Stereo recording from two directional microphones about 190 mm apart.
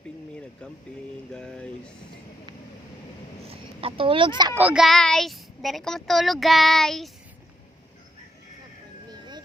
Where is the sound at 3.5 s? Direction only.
30° right (ahead or behind).